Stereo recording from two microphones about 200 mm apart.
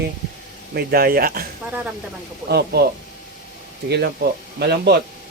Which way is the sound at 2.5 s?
55° right (ahead or behind).